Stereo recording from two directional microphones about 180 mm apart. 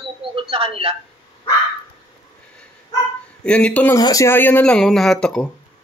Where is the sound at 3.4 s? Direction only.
5° left (ahead or behind).